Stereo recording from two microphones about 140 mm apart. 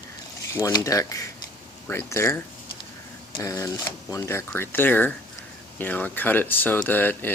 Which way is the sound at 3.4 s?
20° left (ahead or behind).